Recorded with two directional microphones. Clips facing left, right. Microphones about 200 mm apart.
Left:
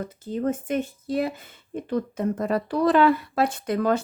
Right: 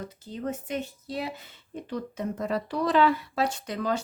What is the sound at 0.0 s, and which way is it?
Speech, 50° left (ahead or behind).